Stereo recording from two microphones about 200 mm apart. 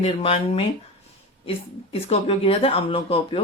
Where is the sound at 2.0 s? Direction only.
30° left (ahead or behind).